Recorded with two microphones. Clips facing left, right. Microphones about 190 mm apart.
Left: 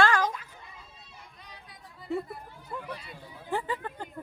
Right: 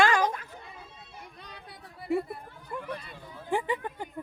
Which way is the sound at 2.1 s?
15° right (ahead or behind).